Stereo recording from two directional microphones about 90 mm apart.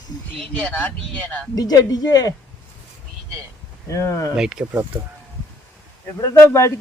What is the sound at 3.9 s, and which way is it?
Speech, 35° left (ahead or behind).